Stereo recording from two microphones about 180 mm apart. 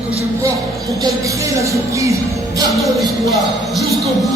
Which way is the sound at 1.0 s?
15° right (ahead or behind).